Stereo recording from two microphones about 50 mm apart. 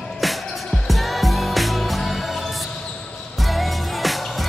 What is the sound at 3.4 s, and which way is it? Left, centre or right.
Music, centre.